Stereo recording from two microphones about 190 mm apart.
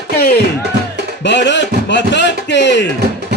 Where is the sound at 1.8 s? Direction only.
65° left (ahead or behind).